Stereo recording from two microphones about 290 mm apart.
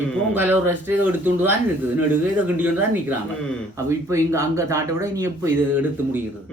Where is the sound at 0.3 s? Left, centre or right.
Centre.